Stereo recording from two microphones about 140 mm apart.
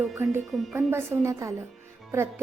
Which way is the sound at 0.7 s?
20° right (ahead or behind).